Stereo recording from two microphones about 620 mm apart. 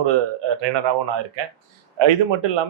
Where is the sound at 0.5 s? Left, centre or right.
Right.